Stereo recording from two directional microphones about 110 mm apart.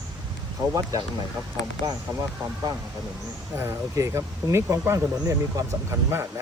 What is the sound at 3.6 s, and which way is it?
Speech, 25° right (ahead or behind).